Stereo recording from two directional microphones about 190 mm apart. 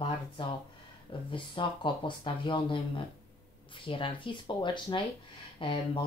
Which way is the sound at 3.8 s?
25° left (ahead or behind).